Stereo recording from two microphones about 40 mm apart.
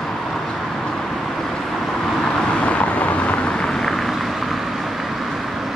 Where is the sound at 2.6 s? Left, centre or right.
Left.